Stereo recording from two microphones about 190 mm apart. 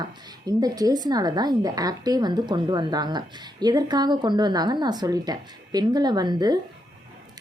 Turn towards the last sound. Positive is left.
turn(degrees=-20)  # may be behind; listen again after turning